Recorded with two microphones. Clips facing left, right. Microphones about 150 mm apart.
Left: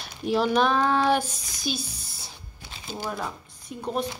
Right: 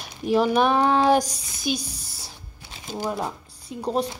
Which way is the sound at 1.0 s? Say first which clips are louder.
Right 4 dB; 40° right (ahead or behind).